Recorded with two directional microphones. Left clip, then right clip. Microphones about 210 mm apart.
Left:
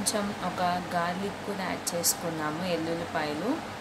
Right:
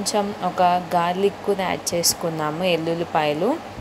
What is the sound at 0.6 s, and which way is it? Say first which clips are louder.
Speech: right 10 dB; 35° right (ahead or behind).